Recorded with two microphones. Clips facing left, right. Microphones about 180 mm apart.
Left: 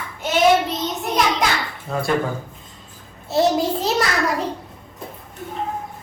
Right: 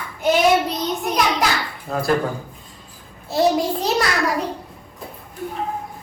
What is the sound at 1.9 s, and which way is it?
Speech, centre (ahead or behind).